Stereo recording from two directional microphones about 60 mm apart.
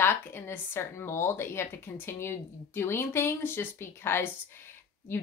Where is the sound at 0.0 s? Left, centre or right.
Left.